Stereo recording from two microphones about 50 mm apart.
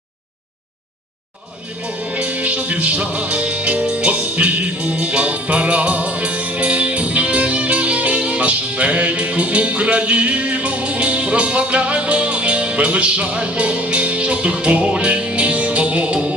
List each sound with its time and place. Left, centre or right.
1.8 s music: right